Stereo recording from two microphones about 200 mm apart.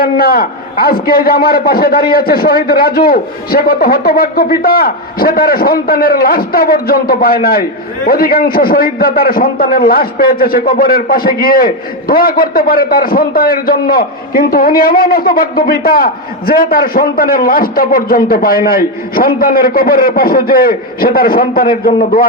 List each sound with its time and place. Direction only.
0.0 s a man's voice: 50° left (ahead or behind)